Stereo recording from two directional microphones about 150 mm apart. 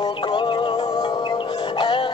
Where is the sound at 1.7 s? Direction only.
30° left (ahead or behind).